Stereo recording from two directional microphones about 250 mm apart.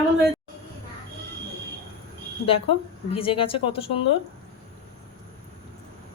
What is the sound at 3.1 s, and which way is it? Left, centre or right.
Speech, left.